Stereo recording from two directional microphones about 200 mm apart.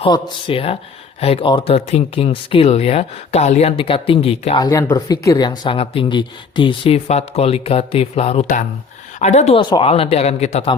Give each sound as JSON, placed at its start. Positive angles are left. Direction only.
{"t": 0.0, "sound": "speech", "side_deg": 25}
{"t": 9.6, "sound": "speech", "side_deg": 20}